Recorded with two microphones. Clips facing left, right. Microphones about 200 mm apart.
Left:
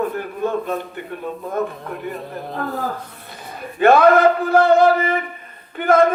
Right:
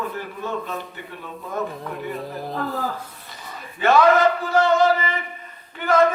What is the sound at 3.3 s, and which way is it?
A man's voice, 55° left (ahead or behind).